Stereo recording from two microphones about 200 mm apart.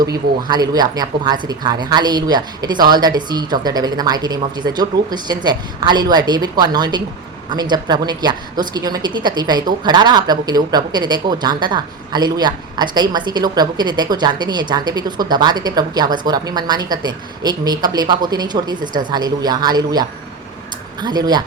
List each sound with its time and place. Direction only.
0.0 s a woman's voice: 20° right (ahead or behind)